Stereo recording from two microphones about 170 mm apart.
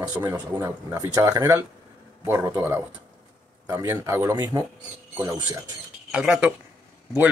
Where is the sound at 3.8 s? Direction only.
15° right (ahead or behind).